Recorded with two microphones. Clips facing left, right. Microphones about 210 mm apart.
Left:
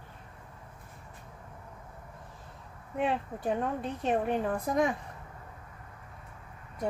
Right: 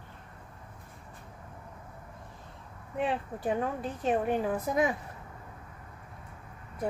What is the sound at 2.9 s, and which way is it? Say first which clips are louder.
A woman's voice: left 1 dB; centre (ahead or behind).